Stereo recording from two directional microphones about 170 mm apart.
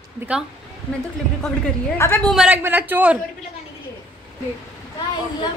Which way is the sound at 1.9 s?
15° left (ahead or behind).